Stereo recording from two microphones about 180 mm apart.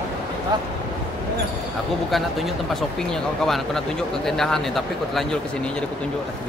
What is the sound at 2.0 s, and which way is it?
Speech, centre (ahead or behind).